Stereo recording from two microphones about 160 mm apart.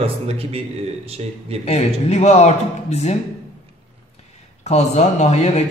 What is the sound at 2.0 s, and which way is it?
Speech, 45° left (ahead or behind).